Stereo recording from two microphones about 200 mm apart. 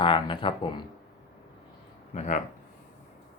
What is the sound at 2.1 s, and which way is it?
Speech, 35° left (ahead or behind).